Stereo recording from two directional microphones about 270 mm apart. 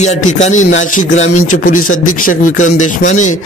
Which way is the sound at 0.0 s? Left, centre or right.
Left.